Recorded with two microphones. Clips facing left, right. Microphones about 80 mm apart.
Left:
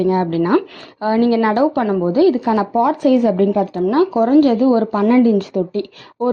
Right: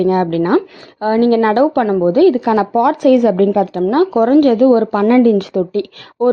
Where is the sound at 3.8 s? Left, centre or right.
Right.